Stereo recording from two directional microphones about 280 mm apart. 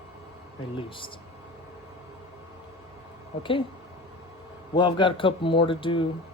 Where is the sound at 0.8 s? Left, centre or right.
Centre.